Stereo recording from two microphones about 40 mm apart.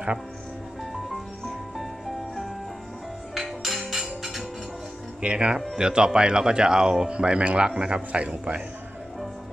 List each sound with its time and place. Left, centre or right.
1.8 s music: centre
5.2 s speech: right
7.1 s speech: right
8.1 s a man's voice: right